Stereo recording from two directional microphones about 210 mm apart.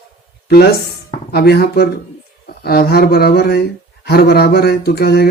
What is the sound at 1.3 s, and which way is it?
Speech, 50° left (ahead or behind).